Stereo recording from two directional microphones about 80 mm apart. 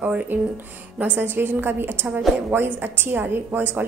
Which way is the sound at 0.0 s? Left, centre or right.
Centre.